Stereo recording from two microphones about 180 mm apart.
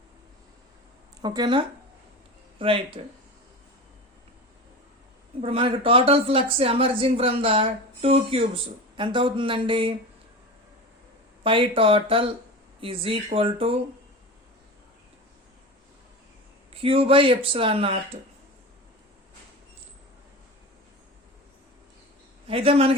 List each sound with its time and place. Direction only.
1.2 s speech: 25° right (ahead or behind)
5.4 s speech: 30° right (ahead or behind)
11.4 s speech: 30° right (ahead or behind)
16.7 s speech: 30° right (ahead or behind)
22.4 s speech: 30° right (ahead or behind)